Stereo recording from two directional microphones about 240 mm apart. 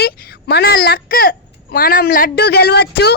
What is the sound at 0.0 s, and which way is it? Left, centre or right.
A woman's voice, left.